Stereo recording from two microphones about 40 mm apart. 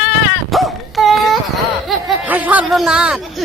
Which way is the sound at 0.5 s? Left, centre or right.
Centre.